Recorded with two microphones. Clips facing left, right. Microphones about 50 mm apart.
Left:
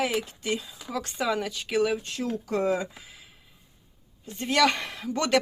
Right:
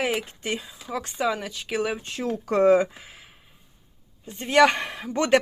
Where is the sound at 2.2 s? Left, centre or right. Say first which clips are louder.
Right 8 dB; right.